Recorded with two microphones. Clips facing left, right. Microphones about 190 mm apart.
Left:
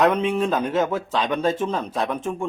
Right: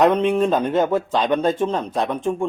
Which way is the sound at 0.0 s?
Centre (ahead or behind).